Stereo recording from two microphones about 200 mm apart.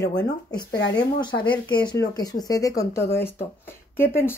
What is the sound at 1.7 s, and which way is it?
Speech, 20° left (ahead or behind).